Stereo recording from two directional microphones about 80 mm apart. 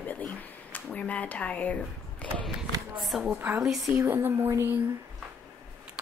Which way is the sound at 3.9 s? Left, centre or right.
Right.